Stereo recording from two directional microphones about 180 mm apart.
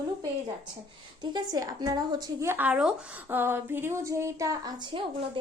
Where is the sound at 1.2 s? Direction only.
20° right (ahead or behind).